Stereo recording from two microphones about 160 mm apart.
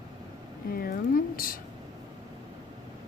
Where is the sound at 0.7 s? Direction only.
65° left (ahead or behind).